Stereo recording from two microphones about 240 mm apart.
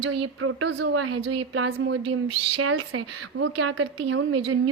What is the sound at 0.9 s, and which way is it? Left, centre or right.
Speech, right.